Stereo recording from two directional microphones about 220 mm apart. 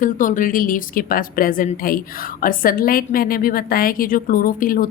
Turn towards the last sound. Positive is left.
turn(degrees=40)  # may be behind; listen again after turning